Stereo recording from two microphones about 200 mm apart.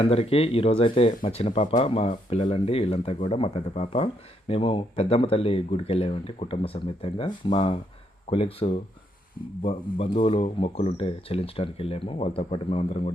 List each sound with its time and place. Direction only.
0.0 s speech: 30° left (ahead or behind)